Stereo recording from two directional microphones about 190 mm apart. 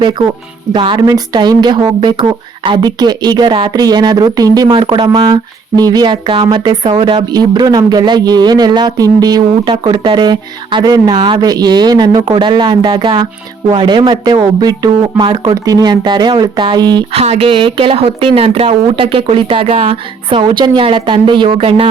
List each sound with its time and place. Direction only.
0.7 s speech: 25° right (ahead or behind)